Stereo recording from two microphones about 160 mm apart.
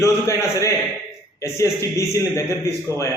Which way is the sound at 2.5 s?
20° right (ahead or behind).